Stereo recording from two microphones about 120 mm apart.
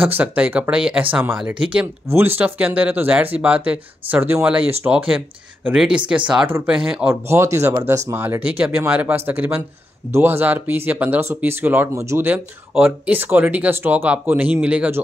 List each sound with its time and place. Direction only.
0.0 s speech: 10° right (ahead or behind)
7.2 s speech: 20° right (ahead or behind)